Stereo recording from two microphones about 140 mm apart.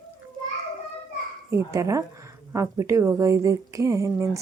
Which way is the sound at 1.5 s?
20° right (ahead or behind).